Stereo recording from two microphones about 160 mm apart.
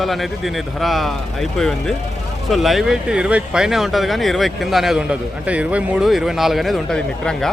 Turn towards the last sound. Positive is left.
turn(degrees=5)  # may be behind; listen again after turning